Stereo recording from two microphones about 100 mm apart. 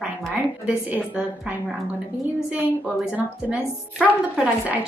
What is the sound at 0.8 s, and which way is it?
Speech, 15° right (ahead or behind).